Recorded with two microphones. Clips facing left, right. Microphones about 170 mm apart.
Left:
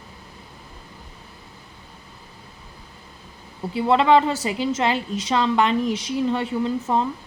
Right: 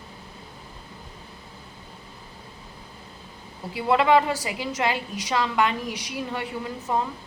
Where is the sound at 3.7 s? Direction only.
25° left (ahead or behind).